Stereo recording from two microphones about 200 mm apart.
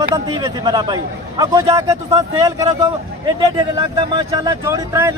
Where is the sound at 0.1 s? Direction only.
20° right (ahead or behind).